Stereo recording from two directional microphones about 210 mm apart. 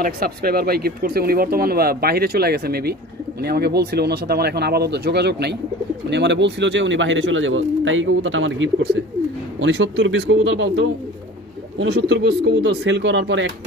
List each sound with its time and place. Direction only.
0.0 s speech: 45° right (ahead or behind)